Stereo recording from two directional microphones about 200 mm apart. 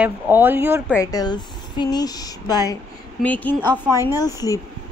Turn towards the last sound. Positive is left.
turn(degrees=20)  # may be behind; listen again after turning